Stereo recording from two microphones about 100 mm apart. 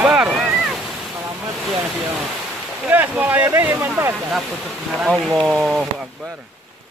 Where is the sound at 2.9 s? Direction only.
20° right (ahead or behind).